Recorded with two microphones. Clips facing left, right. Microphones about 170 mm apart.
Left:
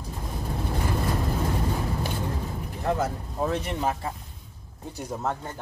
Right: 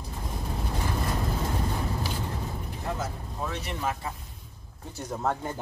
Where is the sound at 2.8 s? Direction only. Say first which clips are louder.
Left 7 dB; 60° left (ahead or behind).